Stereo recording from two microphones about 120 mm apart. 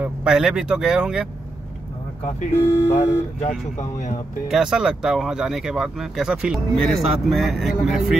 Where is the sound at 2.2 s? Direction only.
60° left (ahead or behind).